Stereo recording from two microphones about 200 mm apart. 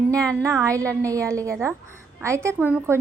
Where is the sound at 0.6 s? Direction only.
15° right (ahead or behind).